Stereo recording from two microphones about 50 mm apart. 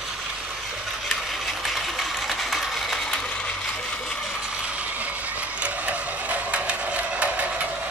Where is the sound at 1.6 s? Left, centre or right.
Centre.